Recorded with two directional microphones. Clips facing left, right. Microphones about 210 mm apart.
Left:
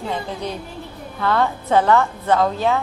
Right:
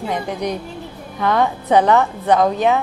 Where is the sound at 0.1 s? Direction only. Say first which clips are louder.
Right 5 dB; 15° right (ahead or behind).